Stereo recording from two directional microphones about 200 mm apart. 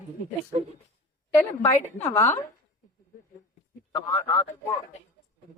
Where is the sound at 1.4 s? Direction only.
10° left (ahead or behind).